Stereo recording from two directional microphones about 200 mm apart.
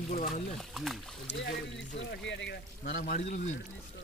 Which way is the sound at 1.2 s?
60° left (ahead or behind).